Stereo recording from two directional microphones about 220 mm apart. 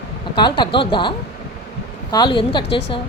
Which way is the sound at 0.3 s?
20° left (ahead or behind).